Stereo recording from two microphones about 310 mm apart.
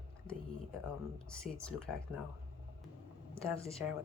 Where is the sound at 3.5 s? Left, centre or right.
Centre.